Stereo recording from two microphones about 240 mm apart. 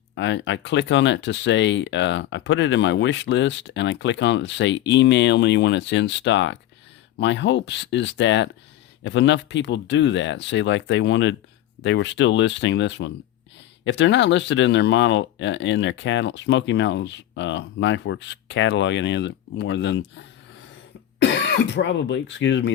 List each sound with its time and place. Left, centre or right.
0.2 s speech: left